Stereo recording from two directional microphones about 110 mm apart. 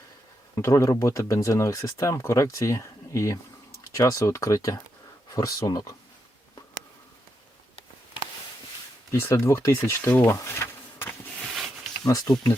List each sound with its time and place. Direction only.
0.5 s speech: 25° left (ahead or behind)
9.1 s speech: 25° left (ahead or behind)
11.5 s a sound: centre (ahead or behind)
12.0 s speech: 35° left (ahead or behind)